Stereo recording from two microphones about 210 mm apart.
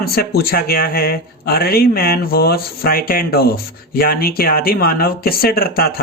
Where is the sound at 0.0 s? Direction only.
50° left (ahead or behind).